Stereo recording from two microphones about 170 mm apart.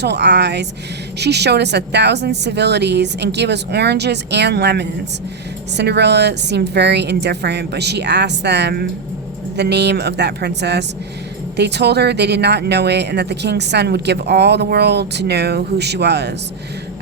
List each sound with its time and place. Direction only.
0.0 s a woman's voice: 80° right